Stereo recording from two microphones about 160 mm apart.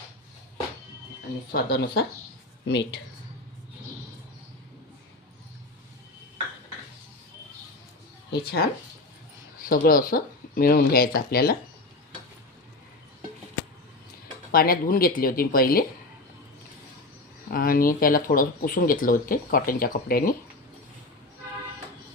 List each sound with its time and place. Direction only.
1.5 s speech: 80° left
2.6 s speech: 90° left
8.3 s speech: 85° left
9.6 s speech: 60° left (ahead or behind)
14.5 s speech: 70° left (ahead or behind)
17.5 s speech: 65° left (ahead or behind)